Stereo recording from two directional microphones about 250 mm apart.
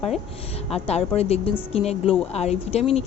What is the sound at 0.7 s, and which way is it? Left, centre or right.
A woman's voice, left.